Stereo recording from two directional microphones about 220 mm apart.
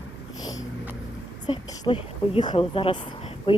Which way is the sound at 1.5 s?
20° left (ahead or behind).